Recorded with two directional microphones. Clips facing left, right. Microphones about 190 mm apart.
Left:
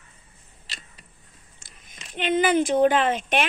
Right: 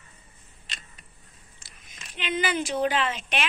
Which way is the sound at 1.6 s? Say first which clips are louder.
Left 2 dB; 50° left (ahead or behind).